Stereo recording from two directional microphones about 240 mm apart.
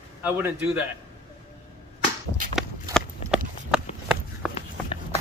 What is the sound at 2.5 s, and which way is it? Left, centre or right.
Run, centre.